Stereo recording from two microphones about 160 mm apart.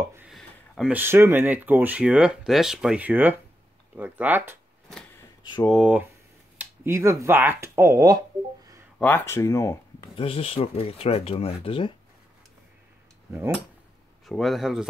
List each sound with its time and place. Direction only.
0.3 s a sound: centre (ahead or behind)
0.9 s speech: 15° right (ahead or behind)
5.7 s speech: 5° right (ahead or behind)
6.6 s speech: 15° right (ahead or behind)
8.9 s speech: 10° left (ahead or behind)
10.1 s speech: 35° left (ahead or behind)
14.2 s speech: centre (ahead or behind)